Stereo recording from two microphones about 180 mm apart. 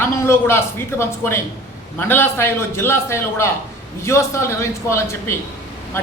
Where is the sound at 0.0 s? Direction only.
15° left (ahead or behind).